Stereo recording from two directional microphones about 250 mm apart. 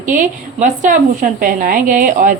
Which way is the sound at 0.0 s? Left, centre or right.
Right.